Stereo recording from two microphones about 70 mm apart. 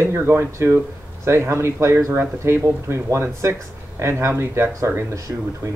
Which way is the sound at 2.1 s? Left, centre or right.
Right.